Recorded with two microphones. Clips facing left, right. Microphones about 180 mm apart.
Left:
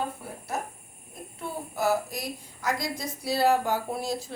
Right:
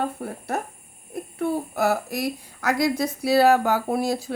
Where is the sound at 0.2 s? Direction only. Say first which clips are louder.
Right 5 dB; 60° right (ahead or behind).